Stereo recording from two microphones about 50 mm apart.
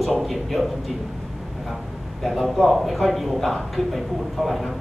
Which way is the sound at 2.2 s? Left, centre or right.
Centre.